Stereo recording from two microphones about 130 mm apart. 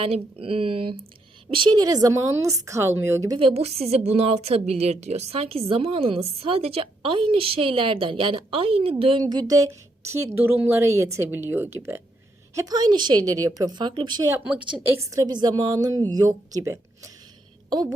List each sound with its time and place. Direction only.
0.0 s a woman's voice: 45° right (ahead or behind); by 3.3 s 20° right (ahead or behind)
3.3 s a woman's voice: 50° right (ahead or behind)
9.2 s a woman's voice: 30° right (ahead or behind)
12.5 s a woman's voice: 30° right (ahead or behind)
14.3 s speech: 5° right (ahead or behind)
14.8 s a woman's voice: 25° right (ahead or behind)